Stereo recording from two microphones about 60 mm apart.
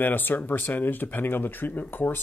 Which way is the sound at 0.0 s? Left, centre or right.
Left.